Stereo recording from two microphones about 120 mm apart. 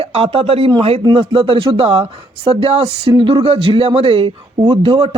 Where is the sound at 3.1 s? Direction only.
45° right (ahead or behind).